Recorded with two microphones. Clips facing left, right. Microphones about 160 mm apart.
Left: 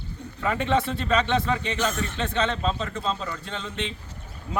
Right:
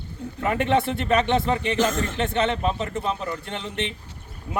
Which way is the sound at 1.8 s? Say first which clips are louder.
Right 4 dB; 90° right.